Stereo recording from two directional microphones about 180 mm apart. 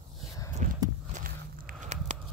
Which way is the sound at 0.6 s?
45° right (ahead or behind).